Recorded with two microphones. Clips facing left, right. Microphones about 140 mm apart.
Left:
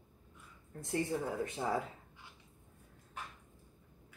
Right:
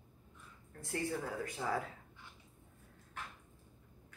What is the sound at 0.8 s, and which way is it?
Speech, 20° left (ahead or behind).